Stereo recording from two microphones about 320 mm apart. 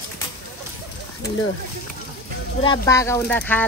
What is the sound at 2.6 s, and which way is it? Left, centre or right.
Speech, centre.